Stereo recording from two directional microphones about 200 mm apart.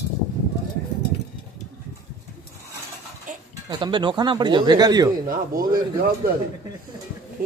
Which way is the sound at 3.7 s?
25° right (ahead or behind).